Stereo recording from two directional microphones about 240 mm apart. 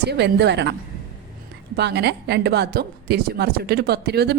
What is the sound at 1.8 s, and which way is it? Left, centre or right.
A woman's voice, right.